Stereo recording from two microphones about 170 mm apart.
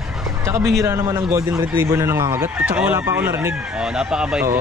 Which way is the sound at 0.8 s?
15° right (ahead or behind).